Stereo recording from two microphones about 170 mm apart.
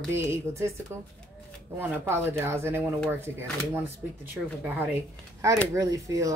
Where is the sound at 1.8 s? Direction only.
15° right (ahead or behind).